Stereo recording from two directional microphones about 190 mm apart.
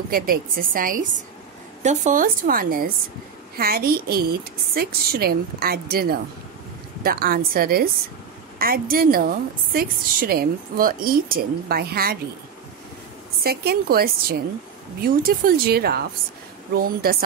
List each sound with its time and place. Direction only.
0.1 s a woman's voice: 50° right (ahead or behind)
13.4 s a woman's voice: 55° right (ahead or behind)